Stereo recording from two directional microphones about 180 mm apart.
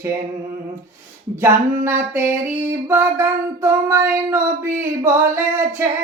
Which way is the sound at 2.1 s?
10° right (ahead or behind).